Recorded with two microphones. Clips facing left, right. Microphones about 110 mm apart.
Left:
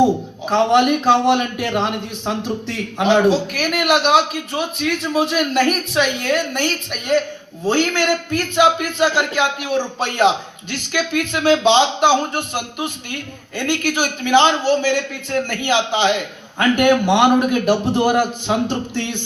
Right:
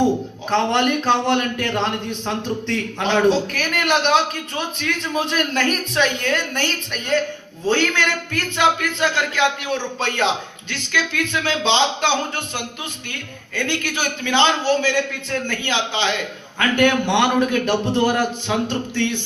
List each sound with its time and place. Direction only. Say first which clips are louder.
0.5 s a man's voice: left 4 dB; 10° left (ahead or behind)
10.7 s a man's voice: left 3 dB; 15° left (ahead or behind)